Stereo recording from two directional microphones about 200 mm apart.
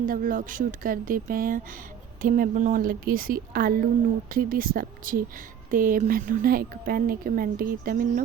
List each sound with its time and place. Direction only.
0.0 s speech: 45° right (ahead or behind)